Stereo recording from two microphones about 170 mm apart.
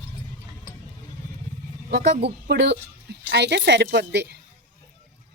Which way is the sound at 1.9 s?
70° right (ahead or behind).